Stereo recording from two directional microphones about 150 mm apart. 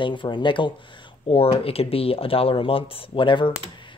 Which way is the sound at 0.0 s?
35° left (ahead or behind).